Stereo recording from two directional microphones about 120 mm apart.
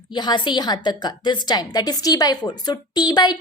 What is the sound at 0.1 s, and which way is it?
A woman's voice, 35° left (ahead or behind).